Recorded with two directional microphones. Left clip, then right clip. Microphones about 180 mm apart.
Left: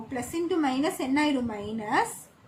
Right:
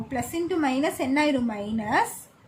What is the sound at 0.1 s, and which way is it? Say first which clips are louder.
A woman's voice: right 1 dB; 40° right (ahead or behind).